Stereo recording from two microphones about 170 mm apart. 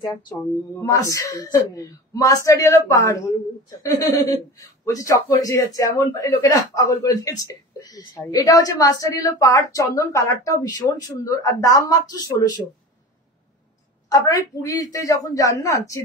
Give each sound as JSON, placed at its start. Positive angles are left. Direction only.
{"t": 0.0, "sound": "speech", "side_deg": 20}
{"t": 14.0, "sound": "a woman's voice", "side_deg": 20}